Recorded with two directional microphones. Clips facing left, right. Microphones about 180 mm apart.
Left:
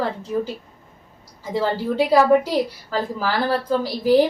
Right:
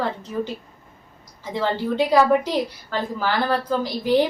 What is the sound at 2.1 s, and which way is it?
A woman's voice, 5° left (ahead or behind).